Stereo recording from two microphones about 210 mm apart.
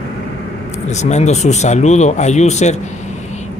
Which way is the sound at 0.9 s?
35° left (ahead or behind).